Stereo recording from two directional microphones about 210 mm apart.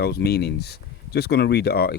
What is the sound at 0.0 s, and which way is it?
Speech, 50° left (ahead or behind).